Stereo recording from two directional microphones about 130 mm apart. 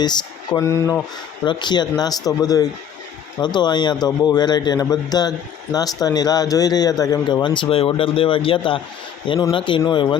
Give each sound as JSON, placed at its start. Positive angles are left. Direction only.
{"t": 0.0, "sound": "speech", "side_deg": 35}
{"t": 1.5, "sound": "speech", "side_deg": 35}